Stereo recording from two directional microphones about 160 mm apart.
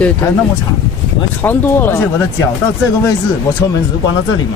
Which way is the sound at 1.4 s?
10° left (ahead or behind).